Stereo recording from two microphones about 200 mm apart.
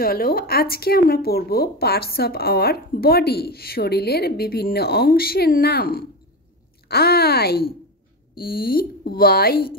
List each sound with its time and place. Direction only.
0.0 s speech: 50° left (ahead or behind)